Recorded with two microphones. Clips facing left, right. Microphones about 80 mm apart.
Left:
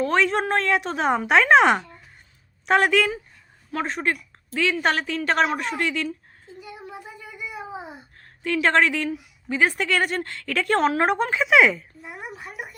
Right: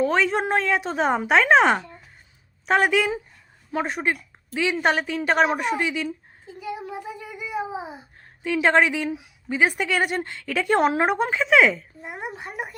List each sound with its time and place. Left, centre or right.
0.0 s a woman's voice: centre
6.6 s a sound: right
8.5 s a woman's voice: centre
10.8 s a woman's voice: centre
11.0 s speech: centre
12.0 s a sound: right
12.4 s speech: right